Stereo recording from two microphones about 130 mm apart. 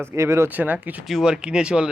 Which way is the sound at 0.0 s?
20° right (ahead or behind).